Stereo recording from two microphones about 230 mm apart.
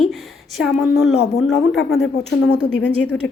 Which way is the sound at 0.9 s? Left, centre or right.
Left.